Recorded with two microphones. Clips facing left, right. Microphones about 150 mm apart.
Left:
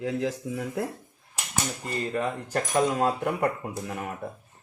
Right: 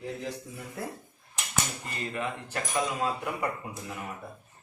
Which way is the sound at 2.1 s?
40° left (ahead or behind).